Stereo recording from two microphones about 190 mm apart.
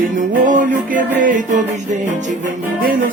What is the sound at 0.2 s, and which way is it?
Music, 45° right (ahead or behind).